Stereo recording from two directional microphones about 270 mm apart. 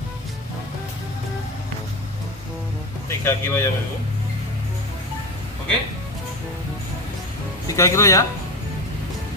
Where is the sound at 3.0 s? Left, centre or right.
Centre.